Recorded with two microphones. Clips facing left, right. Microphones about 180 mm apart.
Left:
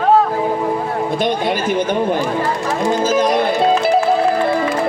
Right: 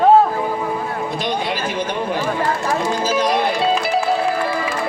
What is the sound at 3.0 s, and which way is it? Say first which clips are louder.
Music: left 4 dB; 50° left (ahead or behind).